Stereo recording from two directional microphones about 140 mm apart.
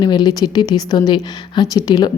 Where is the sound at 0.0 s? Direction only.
30° left (ahead or behind).